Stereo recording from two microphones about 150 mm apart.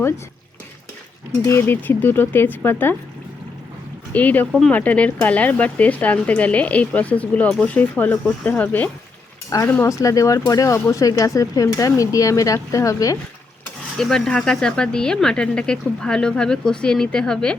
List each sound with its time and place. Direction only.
1.5 s speech: 15° left (ahead or behind)
4.1 s speech: 10° left (ahead or behind)
14.0 s speech: 5° left (ahead or behind)